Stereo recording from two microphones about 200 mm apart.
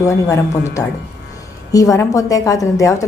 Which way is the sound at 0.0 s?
15° left (ahead or behind).